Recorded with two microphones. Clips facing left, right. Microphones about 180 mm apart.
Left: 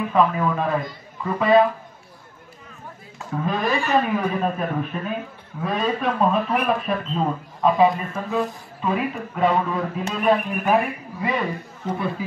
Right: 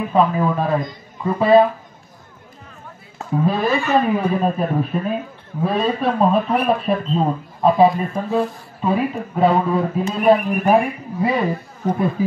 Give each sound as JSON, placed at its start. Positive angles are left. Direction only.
{"t": 0.1, "sound": "speech", "side_deg": -30}
{"t": 3.4, "sound": "speech", "side_deg": -35}